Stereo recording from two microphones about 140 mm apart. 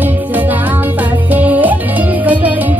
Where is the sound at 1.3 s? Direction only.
10° right (ahead or behind).